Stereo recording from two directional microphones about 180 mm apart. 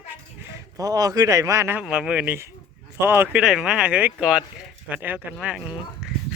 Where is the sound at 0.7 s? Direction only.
20° right (ahead or behind).